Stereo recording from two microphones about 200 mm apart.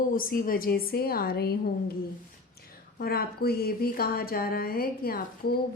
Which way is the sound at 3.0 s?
50° left (ahead or behind).